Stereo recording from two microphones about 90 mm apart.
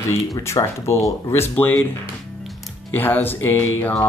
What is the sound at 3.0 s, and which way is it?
Speech, 20° left (ahead or behind).